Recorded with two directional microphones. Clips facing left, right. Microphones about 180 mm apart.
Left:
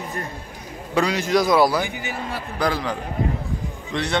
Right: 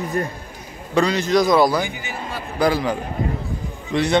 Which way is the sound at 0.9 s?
10° left (ahead or behind).